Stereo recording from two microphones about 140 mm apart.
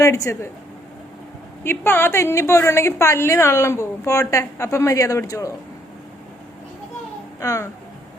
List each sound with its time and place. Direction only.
0.0 s a woman's voice: 20° left (ahead or behind)
1.6 s a woman's voice: 15° left (ahead or behind)
7.3 s speech: 20° left (ahead or behind)